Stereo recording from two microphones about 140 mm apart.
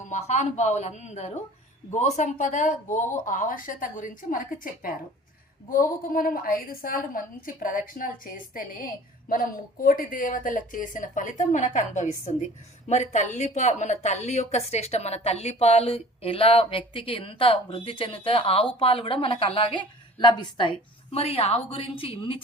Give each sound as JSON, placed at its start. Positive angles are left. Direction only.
{"t": 0.1, "sound": "a woman's voice", "side_deg": 55}